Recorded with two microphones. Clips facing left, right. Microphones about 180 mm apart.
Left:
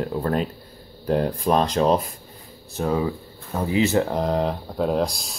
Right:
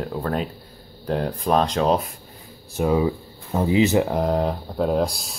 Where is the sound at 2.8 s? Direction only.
15° right (ahead or behind).